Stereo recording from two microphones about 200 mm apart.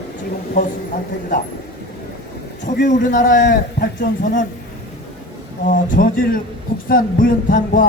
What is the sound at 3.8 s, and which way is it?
Speech, 55° left (ahead or behind).